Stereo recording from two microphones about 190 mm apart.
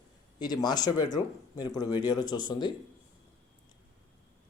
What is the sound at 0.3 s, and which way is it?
Speech, 20° left (ahead or behind).